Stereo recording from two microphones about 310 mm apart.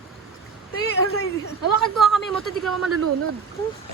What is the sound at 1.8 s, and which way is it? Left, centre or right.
Speech, centre.